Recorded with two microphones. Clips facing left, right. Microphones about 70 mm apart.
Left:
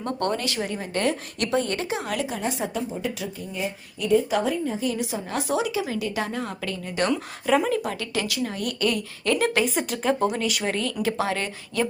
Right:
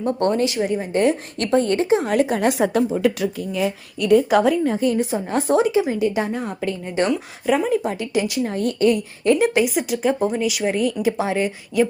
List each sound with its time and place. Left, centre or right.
0.0 s a woman's voice: right
1.4 s a woman's voice: right
2.1 s speech: right
4.8 s a woman's voice: right
5.8 s a woman's voice: right
7.1 s speech: centre
7.9 s a woman's voice: right
8.4 s a woman's voice: right
9.4 s speech: centre